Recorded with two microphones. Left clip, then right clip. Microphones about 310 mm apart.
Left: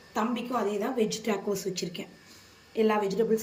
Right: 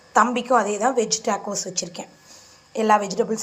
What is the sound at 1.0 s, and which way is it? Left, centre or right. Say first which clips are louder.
A woman's voice: right 6 dB; centre.